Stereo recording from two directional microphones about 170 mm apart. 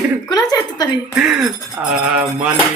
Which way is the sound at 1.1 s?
5° right (ahead or behind).